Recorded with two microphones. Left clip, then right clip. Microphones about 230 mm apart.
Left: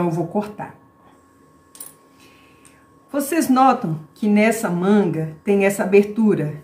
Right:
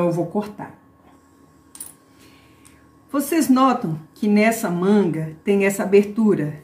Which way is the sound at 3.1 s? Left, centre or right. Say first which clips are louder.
Left 1 dB; centre.